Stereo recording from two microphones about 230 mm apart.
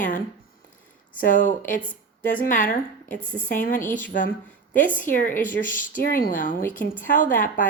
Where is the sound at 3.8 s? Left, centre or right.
Centre.